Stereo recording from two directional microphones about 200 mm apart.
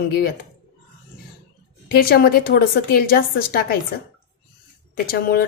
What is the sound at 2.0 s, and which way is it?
A woman's voice, 50° left (ahead or behind).